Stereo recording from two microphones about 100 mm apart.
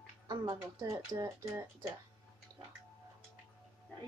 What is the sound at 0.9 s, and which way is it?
Speech, 35° right (ahead or behind).